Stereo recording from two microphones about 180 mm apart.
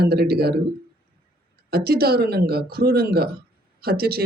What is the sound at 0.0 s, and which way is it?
Speech, 65° right (ahead or behind).